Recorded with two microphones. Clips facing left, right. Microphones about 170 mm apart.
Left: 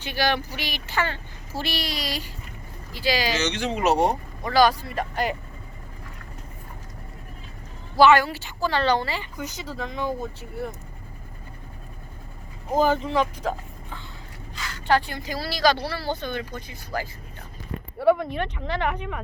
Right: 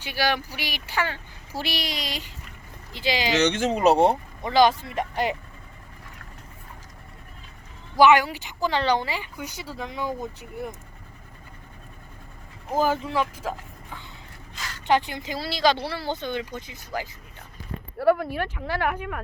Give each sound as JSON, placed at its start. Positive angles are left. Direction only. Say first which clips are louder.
{"t": 0.0, "sound": "a woman's voice", "louder": "left 1 dB", "side_deg": -10}
{"t": 3.3, "sound": "speech", "louder": "right 4 dB", "side_deg": -55}
{"t": 7.9, "sound": "a woman's voice", "louder": "even", "side_deg": -15}
{"t": 12.7, "sound": "speech", "louder": "left 2 dB", "side_deg": -5}
{"t": 14.8, "sound": "speech", "louder": "even", "side_deg": -20}
{"t": 18.0, "sound": "speech", "louder": "left 1 dB", "side_deg": 0}